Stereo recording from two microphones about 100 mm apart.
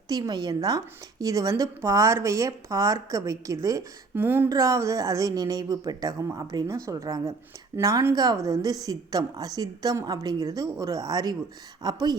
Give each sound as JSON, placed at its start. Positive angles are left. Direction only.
{"t": 0.1, "sound": "a woman's voice", "side_deg": -45}
{"t": 4.1, "sound": "speech", "side_deg": -20}
{"t": 4.4, "sound": "a woman's voice", "side_deg": -35}